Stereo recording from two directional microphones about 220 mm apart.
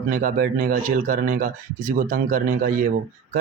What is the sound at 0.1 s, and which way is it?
Speech, 40° right (ahead or behind).